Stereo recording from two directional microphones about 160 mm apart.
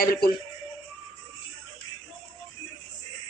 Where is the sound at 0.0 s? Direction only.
70° left (ahead or behind).